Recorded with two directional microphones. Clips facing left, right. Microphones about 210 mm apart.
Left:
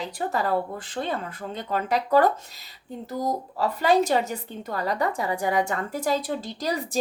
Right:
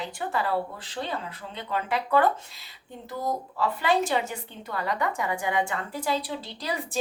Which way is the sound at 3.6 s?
40° left (ahead or behind).